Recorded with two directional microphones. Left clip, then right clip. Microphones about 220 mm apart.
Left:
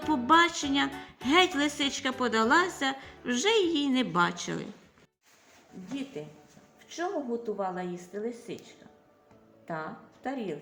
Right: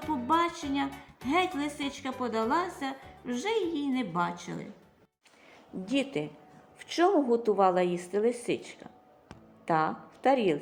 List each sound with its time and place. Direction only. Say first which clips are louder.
0.1 s music: left 5 dB; 15° left (ahead or behind)
0.9 s speech: left 6 dB; 15° left (ahead or behind)
5.9 s a woman's voice: right 8 dB; 25° right (ahead or behind)
9.6 s a woman's voice: right 9 dB; 25° right (ahead or behind)